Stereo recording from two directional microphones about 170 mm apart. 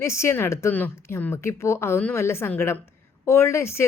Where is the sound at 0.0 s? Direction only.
15° left (ahead or behind).